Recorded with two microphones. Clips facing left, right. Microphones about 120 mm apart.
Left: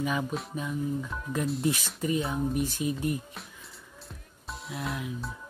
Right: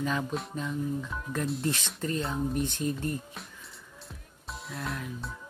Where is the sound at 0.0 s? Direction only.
5° left (ahead or behind).